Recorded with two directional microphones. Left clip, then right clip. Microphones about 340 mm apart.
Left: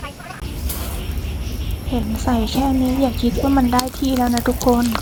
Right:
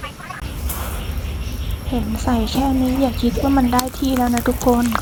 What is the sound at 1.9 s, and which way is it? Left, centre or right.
A woman's voice, centre.